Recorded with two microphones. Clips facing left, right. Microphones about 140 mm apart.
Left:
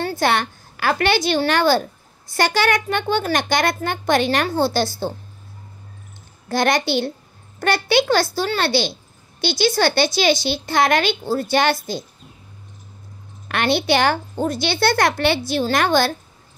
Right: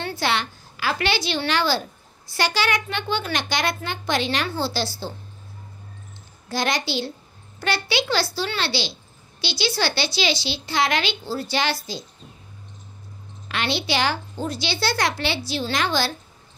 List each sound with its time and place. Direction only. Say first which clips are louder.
0.0 s a woman's voice: left 5 dB; 50° left (ahead or behind)
6.5 s a woman's voice: left 6 dB; 55° left (ahead or behind)
13.5 s a woman's voice: left 7 dB; 55° left (ahead or behind)